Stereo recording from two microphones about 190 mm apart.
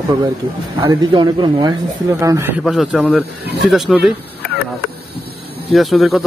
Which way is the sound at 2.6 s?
Centre (ahead or behind).